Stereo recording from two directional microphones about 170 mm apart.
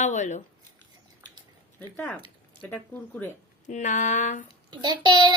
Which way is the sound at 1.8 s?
10° left (ahead or behind).